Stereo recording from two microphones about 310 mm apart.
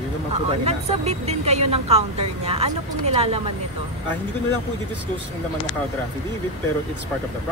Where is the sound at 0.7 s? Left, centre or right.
Centre.